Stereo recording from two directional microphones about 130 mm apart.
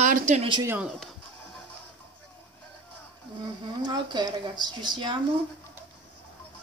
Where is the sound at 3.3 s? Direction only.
35° right (ahead or behind).